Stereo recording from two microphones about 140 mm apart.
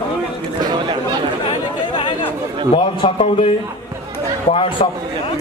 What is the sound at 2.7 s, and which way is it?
Speech, 40° left (ahead or behind).